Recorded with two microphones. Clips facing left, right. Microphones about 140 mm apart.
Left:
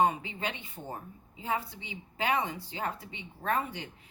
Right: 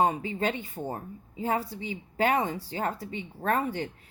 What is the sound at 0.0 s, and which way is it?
A man's voice, 40° right (ahead or behind).